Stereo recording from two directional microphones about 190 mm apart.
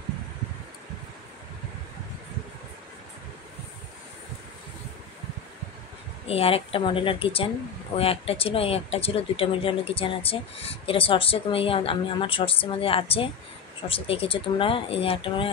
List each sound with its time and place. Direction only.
6.2 s speech: 30° left (ahead or behind)